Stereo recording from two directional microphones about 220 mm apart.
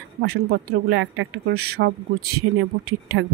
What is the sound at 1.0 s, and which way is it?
A woman's voice, 60° right (ahead or behind).